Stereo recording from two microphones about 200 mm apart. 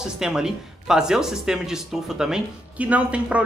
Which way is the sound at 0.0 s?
5° right (ahead or behind).